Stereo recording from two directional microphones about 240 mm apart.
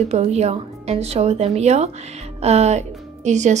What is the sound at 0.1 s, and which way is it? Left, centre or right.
Speech, right.